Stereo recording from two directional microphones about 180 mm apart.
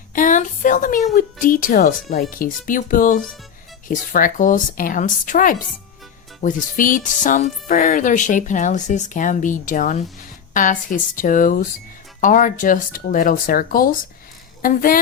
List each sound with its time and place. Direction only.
0.1 s a woman's voice: 45° left (ahead or behind)